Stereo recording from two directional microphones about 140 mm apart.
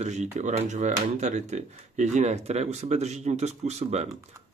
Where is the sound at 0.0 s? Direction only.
55° right (ahead or behind).